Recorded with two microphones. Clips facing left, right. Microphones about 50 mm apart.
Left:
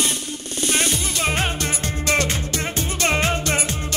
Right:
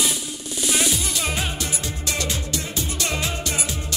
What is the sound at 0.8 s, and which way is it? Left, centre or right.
Music, left.